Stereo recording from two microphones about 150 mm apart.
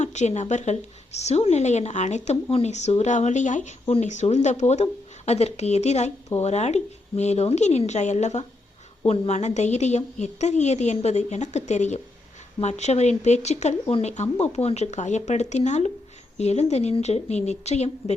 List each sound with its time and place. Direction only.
0.0 s a woman's voice: 50° left (ahead or behind)